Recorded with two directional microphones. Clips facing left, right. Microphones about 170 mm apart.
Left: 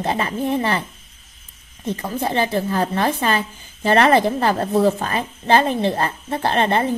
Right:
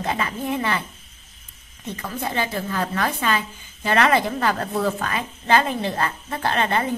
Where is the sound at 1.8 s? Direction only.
35° left (ahead or behind).